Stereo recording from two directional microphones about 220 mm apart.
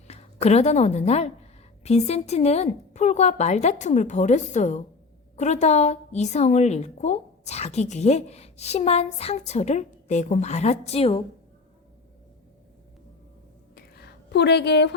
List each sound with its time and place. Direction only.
0.1 s a woman's voice: 30° left (ahead or behind)
13.7 s whispering: 45° left (ahead or behind)